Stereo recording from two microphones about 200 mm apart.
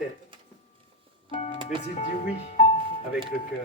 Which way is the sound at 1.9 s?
30° left (ahead or behind).